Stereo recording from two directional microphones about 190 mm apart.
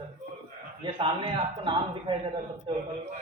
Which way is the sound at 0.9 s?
25° right (ahead or behind).